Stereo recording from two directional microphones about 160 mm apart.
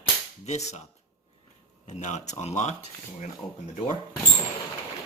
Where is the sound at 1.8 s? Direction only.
45° left (ahead or behind).